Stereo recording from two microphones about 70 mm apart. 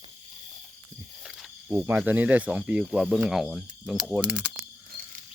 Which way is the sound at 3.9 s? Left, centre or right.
Centre.